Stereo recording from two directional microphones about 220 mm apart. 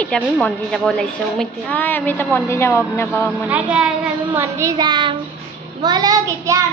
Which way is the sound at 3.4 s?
5° right (ahead or behind).